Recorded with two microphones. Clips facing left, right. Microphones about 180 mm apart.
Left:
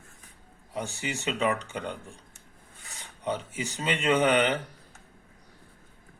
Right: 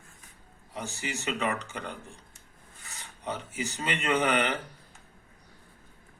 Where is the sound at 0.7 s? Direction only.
30° left (ahead or behind).